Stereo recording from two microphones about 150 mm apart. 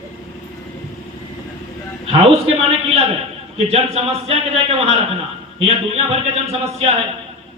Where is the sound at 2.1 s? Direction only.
40° right (ahead or behind).